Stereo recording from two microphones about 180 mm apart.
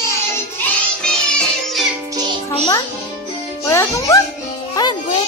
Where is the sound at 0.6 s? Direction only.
5° left (ahead or behind).